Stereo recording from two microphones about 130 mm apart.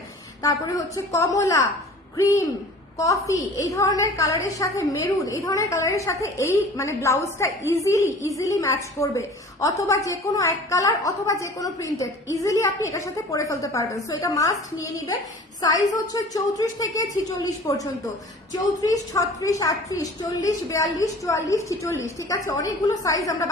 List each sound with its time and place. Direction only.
0.4 s a woman's voice: 25° left (ahead or behind)